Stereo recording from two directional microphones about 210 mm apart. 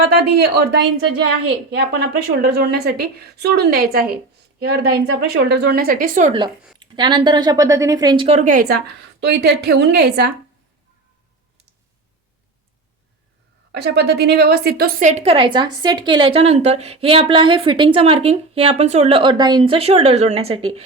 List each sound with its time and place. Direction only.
0.1 s a woman's voice: 50° right (ahead or behind)
6.7 s a woman's voice: 20° right (ahead or behind); by 10.3 s 50° right (ahead or behind)
13.7 s a woman's voice: 50° right (ahead or behind); by 20.8 s 30° right (ahead or behind)